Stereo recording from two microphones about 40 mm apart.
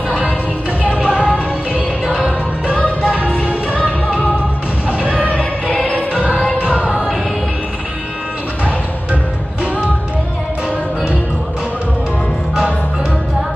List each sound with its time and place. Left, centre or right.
0.9 s music: right
4.8 s music: right
5.4 s music: left
5.9 s music: right
6.6 s a sound: right